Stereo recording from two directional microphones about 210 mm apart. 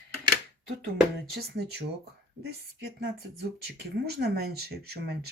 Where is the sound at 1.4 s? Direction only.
50° right (ahead or behind).